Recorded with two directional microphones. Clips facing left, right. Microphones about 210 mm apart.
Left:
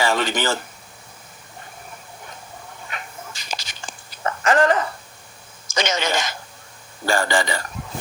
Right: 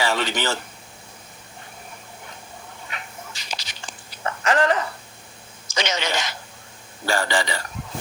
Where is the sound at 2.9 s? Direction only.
45° left (ahead or behind).